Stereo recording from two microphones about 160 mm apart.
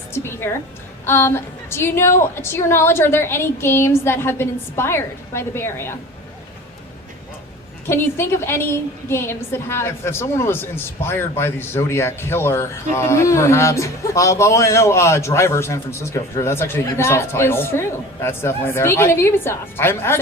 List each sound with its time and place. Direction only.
0.1 s a woman's voice: 15° left (ahead or behind)
7.9 s a woman's voice: 15° left (ahead or behind)